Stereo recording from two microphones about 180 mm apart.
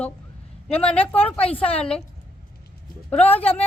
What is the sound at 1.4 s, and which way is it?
Speech, 30° left (ahead or behind).